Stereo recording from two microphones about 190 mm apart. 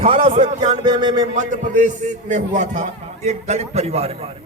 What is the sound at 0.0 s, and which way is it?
Speech, 30° right (ahead or behind).